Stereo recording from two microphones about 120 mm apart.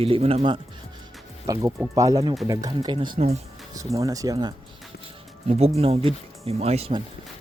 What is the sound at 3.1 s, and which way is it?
Speech, 60° right (ahead or behind).